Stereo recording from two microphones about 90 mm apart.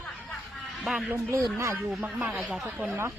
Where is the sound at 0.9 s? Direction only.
5° right (ahead or behind).